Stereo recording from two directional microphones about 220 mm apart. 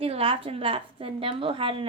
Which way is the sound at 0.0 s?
25° right (ahead or behind).